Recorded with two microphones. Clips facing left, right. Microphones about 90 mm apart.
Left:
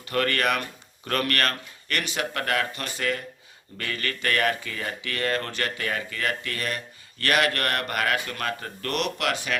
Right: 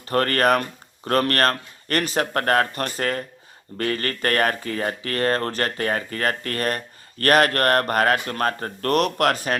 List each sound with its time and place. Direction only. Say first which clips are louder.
0.0 s speech: right 5 dB; 40° right (ahead or behind)